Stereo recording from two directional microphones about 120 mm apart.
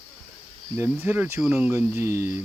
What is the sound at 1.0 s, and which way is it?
Speech, 15° right (ahead or behind).